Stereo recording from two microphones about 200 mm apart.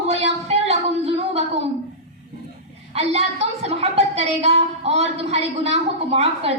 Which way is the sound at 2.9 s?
30° right (ahead or behind).